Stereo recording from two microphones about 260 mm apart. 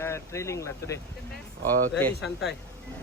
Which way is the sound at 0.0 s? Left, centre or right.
Centre.